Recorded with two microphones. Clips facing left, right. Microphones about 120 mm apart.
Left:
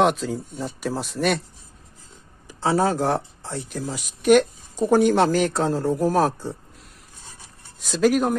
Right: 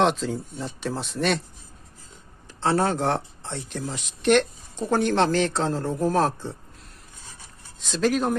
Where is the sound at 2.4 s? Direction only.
5° left (ahead or behind).